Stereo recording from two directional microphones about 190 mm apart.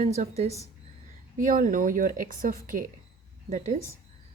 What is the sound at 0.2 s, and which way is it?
A woman's voice, 35° right (ahead or behind).